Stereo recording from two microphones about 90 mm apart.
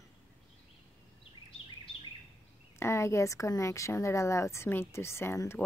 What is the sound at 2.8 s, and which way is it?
A woman's voice, 30° left (ahead or behind).